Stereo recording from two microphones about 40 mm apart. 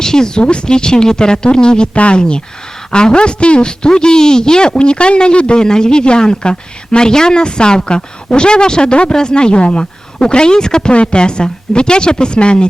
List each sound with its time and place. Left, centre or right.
0.0 s a man's voice: centre